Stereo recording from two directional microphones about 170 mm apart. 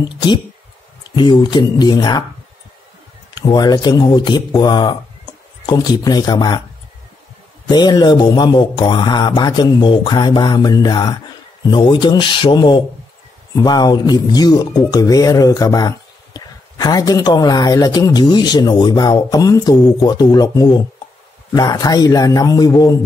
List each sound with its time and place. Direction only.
0.1 s speech: 25° left (ahead or behind)
3.3 s speech: 25° left (ahead or behind)
7.6 s speech: 25° left (ahead or behind)